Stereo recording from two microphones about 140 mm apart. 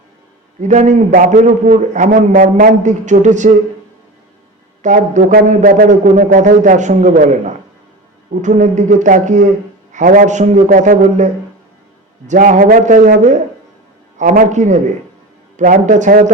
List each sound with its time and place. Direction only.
0.6 s a man's voice: 60° right (ahead or behind)
4.8 s a man's voice: 65° right (ahead or behind)
12.3 s a man's voice: 65° right (ahead or behind)